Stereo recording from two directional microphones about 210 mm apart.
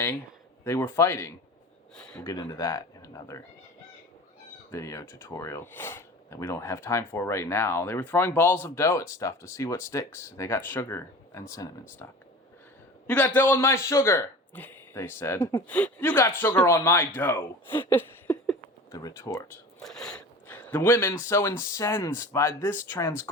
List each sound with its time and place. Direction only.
0.6 s speech: 15° left (ahead or behind)
2.2 s speech: 20° left (ahead or behind)
4.7 s speech: 15° left (ahead or behind)
13.1 s speech: 10° left (ahead or behind)
19.8 s speech: centre (ahead or behind)